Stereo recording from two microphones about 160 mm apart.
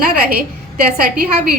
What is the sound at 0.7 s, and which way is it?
Speech, 65° right (ahead or behind).